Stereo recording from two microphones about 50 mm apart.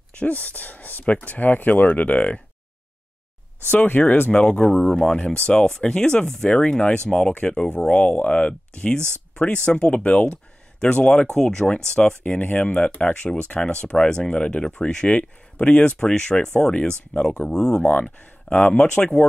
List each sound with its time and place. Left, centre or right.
0.1 s speech: left
3.7 s speech: left
4.6 s speech: centre; by 12.7 s left
12.7 s speech: left
16.0 s speech: centre
18.0 s speech: left